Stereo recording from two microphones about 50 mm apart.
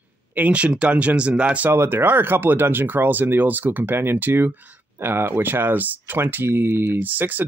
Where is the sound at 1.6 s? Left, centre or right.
Right.